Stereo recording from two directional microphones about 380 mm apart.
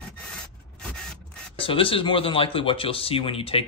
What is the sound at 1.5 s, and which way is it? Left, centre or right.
Speech, centre.